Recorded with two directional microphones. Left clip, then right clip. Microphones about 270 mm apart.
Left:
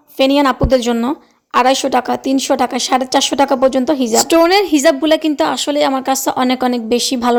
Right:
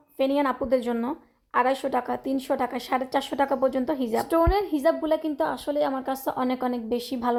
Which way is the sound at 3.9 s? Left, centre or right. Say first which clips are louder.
Left 12 dB; left.